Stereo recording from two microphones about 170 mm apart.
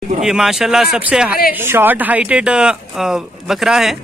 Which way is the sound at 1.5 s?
10° right (ahead or behind).